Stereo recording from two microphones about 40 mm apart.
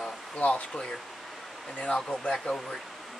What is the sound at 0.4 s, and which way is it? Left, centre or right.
Speech, left.